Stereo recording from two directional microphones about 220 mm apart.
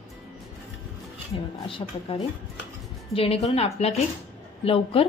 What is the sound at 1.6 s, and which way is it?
A woman's voice, 25° left (ahead or behind).